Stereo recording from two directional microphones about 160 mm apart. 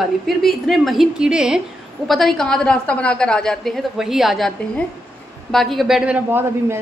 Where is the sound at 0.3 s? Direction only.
Centre (ahead or behind).